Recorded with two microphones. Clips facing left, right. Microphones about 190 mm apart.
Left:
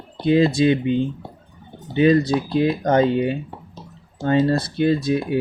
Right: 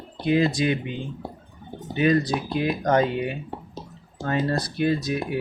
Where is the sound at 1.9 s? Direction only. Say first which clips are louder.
Left 5 dB; 25° left (ahead or behind).